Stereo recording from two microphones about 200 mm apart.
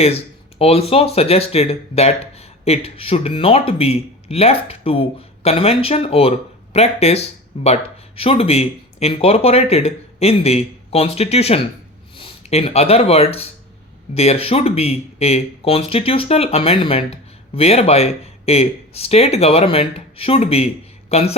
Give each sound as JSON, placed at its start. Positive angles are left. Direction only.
{"t": 0.6, "sound": "a woman's voice", "side_deg": 30}